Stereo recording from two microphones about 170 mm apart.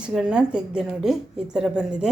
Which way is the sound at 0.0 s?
5° right (ahead or behind).